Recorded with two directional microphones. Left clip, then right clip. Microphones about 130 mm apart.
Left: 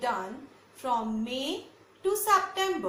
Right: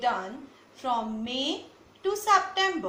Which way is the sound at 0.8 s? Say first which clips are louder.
Right 1 dB; 60° left (ahead or behind).